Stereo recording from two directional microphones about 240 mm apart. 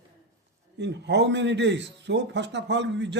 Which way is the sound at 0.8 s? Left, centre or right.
Right.